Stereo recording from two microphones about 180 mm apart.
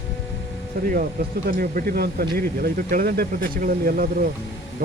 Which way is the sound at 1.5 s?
55° right (ahead or behind).